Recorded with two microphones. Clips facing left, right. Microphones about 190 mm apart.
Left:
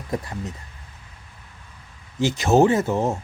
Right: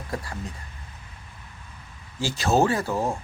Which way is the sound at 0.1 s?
20° left (ahead or behind).